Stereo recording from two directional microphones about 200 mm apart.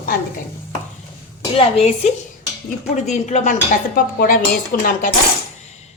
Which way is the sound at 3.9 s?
45° left (ahead or behind).